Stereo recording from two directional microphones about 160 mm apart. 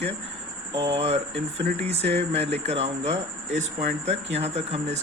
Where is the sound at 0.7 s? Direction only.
35° right (ahead or behind).